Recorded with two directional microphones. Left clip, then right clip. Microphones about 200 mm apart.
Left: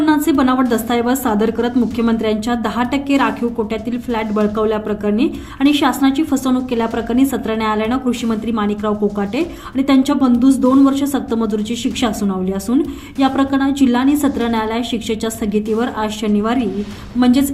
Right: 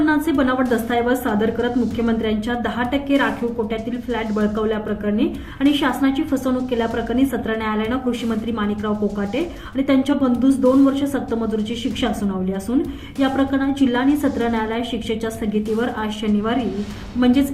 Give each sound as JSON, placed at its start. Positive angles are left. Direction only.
{"t": 0.0, "sound": "a woman's voice", "side_deg": 40}
{"t": 4.4, "sound": "a woman's voice", "side_deg": 40}